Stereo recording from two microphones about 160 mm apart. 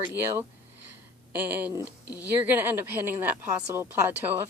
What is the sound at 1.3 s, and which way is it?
Speech, 10° right (ahead or behind).